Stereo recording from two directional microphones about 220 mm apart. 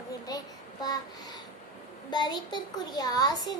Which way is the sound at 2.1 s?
20° left (ahead or behind).